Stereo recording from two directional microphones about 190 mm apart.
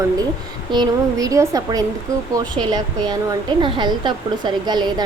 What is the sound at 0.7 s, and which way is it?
A woman's voice, 20° right (ahead or behind).